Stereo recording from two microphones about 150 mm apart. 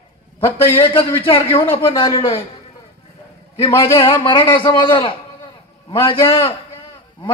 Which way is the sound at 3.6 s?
35° left (ahead or behind).